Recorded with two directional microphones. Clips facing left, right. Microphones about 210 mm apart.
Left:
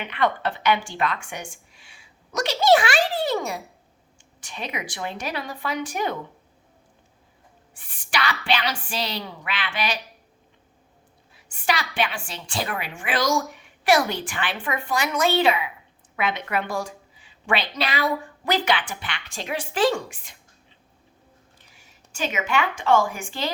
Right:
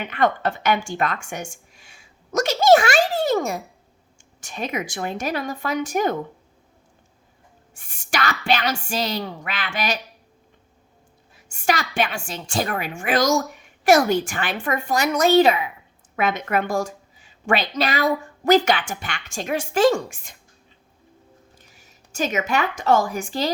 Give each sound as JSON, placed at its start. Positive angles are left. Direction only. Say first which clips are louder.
{"t": 0.0, "sound": "a woman's voice", "louder": "right 3 dB", "side_deg": -45}
{"t": 7.7, "sound": "a woman's voice", "louder": "right 2 dB", "side_deg": -45}
{"t": 11.3, "sound": "a woman's voice", "louder": "right 3 dB", "side_deg": -45}
{"t": 21.6, "sound": "a woman's voice", "louder": "right 2 dB", "side_deg": -40}